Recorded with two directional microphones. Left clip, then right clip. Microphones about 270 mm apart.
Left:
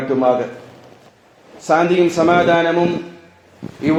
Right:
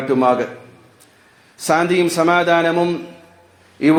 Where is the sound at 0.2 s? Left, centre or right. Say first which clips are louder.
Left 1 dB; right.